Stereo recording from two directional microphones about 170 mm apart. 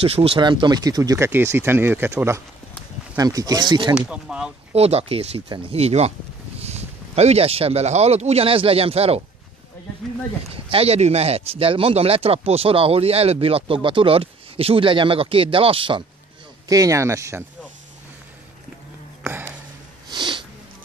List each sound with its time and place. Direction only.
0.0 s speech: 35° right (ahead or behind)
3.9 s speech: 5° right (ahead or behind)
4.7 s speech: 35° right (ahead or behind)
10.5 s speech: 35° right (ahead or behind)
16.6 s speech: 20° right (ahead or behind)
19.2 s a sound: 10° right (ahead or behind)
20.1 s sniff: 25° right (ahead or behind)